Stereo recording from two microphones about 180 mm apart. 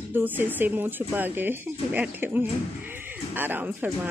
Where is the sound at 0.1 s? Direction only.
10° right (ahead or behind).